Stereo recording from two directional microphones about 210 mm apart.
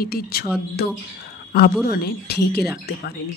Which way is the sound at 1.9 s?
45° left (ahead or behind).